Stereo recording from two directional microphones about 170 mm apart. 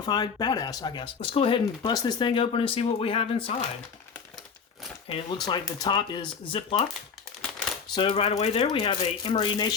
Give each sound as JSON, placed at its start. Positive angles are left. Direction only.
{"t": 0.0, "sound": "speech", "side_deg": 25}
{"t": 5.0, "sound": "speech", "side_deg": 30}
{"t": 7.9, "sound": "speech", "side_deg": 30}